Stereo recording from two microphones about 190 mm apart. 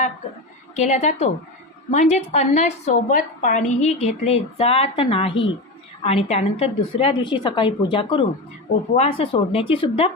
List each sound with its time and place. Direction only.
0.8 s a woman's voice: 35° left (ahead or behind)